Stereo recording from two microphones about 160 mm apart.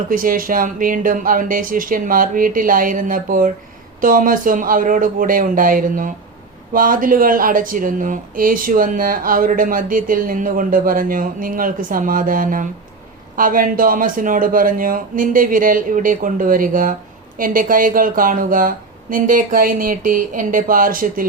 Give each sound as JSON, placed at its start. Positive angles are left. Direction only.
{"t": 0.1, "sound": "speech", "side_deg": -60}